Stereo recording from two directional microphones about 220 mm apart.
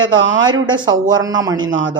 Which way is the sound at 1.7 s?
60° right (ahead or behind).